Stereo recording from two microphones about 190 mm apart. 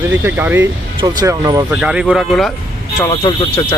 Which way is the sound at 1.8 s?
5° right (ahead or behind).